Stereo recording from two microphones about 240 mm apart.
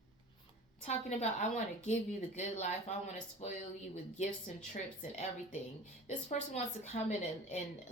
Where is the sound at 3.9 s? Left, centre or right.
Left.